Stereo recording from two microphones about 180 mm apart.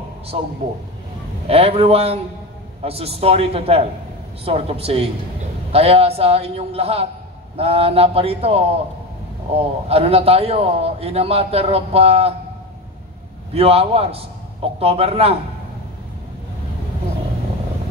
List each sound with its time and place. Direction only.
0.3 s a man's voice: 35° right (ahead or behind)
13.6 s a man's voice: 35° right (ahead or behind)